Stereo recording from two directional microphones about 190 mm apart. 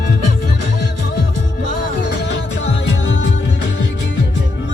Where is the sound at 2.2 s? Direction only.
65° left (ahead or behind).